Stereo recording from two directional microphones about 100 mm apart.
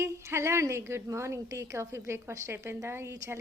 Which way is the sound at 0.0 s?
25° right (ahead or behind).